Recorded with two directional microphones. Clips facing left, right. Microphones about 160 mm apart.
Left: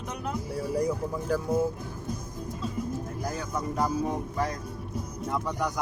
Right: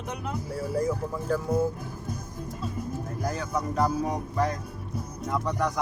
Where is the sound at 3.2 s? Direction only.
Centre (ahead or behind).